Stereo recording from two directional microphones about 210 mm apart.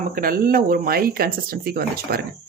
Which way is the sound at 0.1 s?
45° right (ahead or behind).